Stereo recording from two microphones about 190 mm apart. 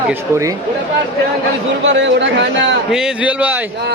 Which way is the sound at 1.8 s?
70° right (ahead or behind).